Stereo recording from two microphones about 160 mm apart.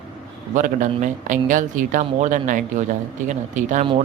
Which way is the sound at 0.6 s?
55° right (ahead or behind).